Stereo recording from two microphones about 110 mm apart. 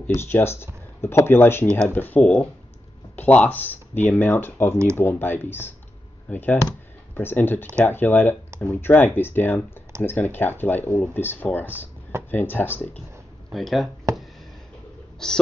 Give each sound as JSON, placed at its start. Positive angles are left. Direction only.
{"t": 0.0, "sound": "speech", "side_deg": 20}
{"t": 13.5, "sound": "speech", "side_deg": 0}
{"t": 14.1, "sound": "a sound", "side_deg": -25}
{"t": 15.2, "sound": "speech", "side_deg": 5}